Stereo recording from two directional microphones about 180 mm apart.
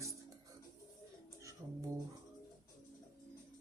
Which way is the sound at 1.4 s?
15° right (ahead or behind).